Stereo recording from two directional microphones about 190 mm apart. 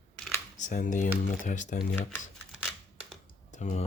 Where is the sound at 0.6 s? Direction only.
40° left (ahead or behind).